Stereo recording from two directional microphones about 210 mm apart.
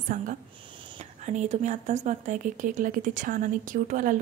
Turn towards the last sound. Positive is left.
turn(degrees=-40)  # may be behind; listen again after turning